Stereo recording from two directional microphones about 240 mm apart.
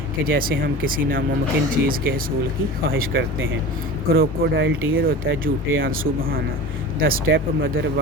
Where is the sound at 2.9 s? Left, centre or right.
Right.